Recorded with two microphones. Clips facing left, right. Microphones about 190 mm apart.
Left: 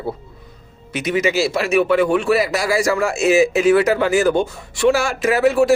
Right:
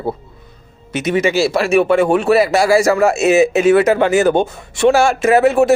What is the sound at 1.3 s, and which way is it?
Speech, 60° right (ahead or behind).